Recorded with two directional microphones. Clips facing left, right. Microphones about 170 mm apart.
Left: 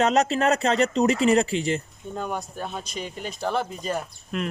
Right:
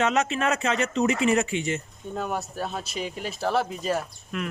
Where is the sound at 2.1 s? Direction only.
5° right (ahead or behind).